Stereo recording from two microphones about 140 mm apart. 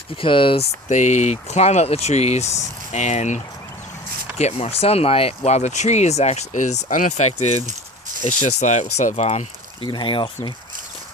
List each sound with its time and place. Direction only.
0.2 s speech: 40° left (ahead or behind)
0.9 s speech: 60° left (ahead or behind)
9.9 s speech: 35° left (ahead or behind)